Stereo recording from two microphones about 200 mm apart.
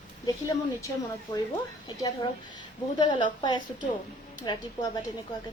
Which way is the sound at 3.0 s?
25° left (ahead or behind).